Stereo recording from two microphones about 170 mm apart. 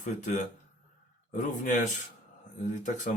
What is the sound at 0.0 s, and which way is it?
Speech, 50° left (ahead or behind).